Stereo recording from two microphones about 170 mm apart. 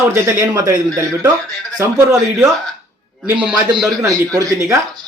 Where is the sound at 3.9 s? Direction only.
20° right (ahead or behind).